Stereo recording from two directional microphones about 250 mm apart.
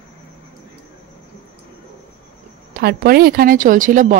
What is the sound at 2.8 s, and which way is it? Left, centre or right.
A woman's voice, right.